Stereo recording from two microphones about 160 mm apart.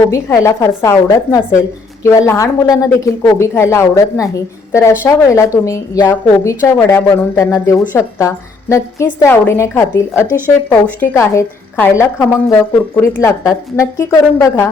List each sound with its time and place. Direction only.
0.1 s a woman's voice: 20° left (ahead or behind)
2.0 s a woman's voice: 15° left (ahead or behind)